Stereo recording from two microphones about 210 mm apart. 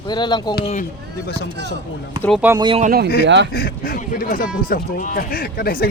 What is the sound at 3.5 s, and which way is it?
Speech, 45° left (ahead or behind).